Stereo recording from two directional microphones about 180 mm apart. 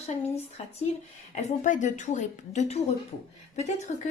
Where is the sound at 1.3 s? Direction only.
40° left (ahead or behind).